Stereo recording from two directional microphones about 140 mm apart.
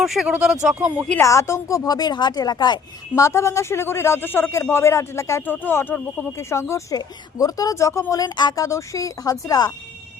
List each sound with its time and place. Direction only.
0.0 s speech: centre (ahead or behind)
1.2 s a woman's voice: 20° left (ahead or behind)